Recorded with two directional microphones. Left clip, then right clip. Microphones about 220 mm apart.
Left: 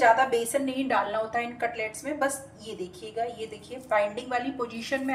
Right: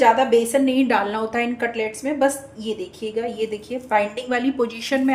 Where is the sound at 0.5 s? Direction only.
45° right (ahead or behind).